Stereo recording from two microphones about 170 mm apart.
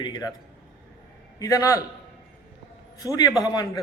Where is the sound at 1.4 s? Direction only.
20° left (ahead or behind).